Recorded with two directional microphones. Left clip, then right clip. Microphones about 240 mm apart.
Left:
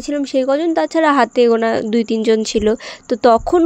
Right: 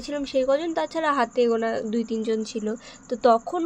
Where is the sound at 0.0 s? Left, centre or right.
Left.